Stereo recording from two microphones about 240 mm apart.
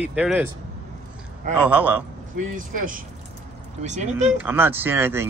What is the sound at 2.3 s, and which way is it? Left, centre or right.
Speech, right.